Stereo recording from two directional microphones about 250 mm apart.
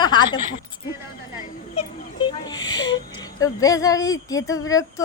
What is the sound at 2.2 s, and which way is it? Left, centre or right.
A woman's voice, centre.